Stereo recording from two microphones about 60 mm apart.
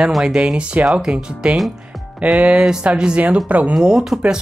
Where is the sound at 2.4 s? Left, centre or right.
Centre.